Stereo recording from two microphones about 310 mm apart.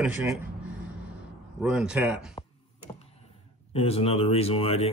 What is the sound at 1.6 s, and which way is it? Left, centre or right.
Speech, centre.